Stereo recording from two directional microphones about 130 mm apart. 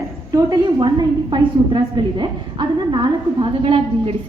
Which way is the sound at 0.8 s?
40° right (ahead or behind).